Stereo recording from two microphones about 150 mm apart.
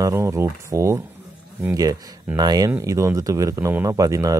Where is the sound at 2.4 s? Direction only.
25° right (ahead or behind).